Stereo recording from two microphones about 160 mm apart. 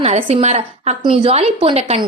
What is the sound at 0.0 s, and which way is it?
A woman's voice, 40° right (ahead or behind).